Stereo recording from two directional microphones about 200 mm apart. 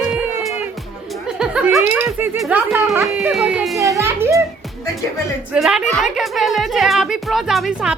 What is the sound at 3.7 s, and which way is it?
Children playing, 15° right (ahead or behind).